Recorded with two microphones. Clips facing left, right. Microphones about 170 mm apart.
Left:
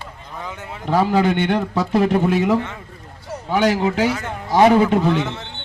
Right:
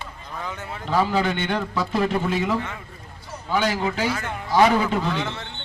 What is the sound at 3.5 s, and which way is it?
Speech, 65° left (ahead or behind).